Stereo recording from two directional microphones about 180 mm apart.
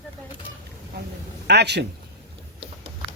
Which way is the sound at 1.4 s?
70° right (ahead or behind).